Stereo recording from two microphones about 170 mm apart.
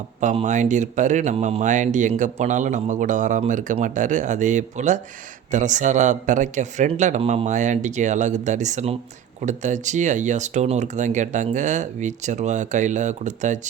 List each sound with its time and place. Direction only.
0.2 s speech: 45° right (ahead or behind)